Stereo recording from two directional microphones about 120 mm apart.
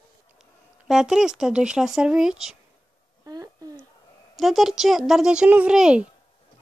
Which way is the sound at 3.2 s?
30° right (ahead or behind).